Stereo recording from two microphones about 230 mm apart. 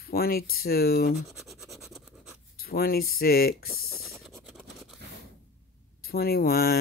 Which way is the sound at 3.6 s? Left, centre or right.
Centre.